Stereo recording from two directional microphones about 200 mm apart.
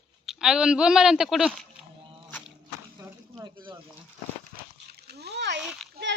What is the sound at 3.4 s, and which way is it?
Speech, 20° right (ahead or behind).